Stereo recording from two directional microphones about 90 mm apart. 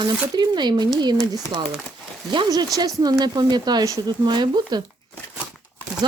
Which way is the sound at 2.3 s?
50° right (ahead or behind).